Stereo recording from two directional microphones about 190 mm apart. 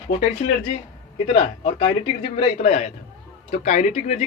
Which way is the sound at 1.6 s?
30° left (ahead or behind).